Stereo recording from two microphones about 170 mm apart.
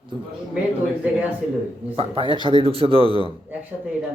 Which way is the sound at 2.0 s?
30° right (ahead or behind).